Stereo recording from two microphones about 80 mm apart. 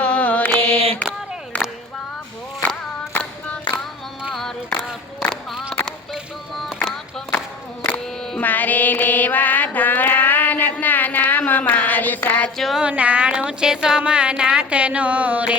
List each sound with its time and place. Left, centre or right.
0.0 s mantra: centre
3.1 s clapping: centre
4.4 s a sound: centre
6.7 s music: centre
8.4 s mantra: left
11.7 s a sound: left
12.5 s speech: centre
12.8 s speech: centre